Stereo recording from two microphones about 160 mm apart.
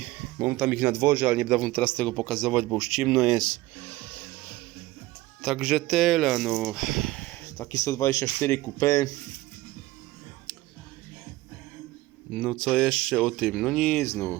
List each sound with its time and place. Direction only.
0.0 s speech: 10° right (ahead or behind)
3.8 s music: 10° left (ahead or behind)
5.4 s speech: centre (ahead or behind); by 9.1 s 20° left (ahead or behind)
10.5 s music: 5° left (ahead or behind)
12.3 s speech: 5° left (ahead or behind)